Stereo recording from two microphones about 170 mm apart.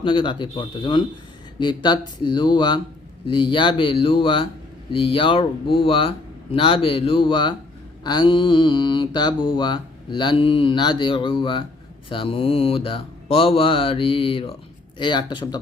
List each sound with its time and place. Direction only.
0.0 s speech: 30° left (ahead or behind)